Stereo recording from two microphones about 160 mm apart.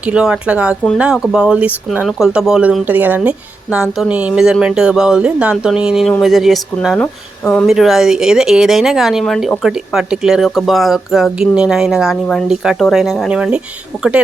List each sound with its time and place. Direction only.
0.0 s speech: 5° right (ahead or behind)
7.0 s speech: 10° left (ahead or behind)
7.7 s speech: centre (ahead or behind)